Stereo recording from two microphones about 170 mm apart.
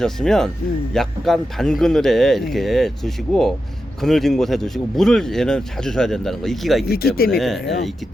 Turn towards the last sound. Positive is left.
turn(degrees=0)  # may be behind; listen again after turning